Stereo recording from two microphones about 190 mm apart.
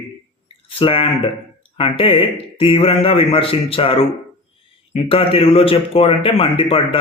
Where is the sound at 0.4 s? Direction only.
30° left (ahead or behind).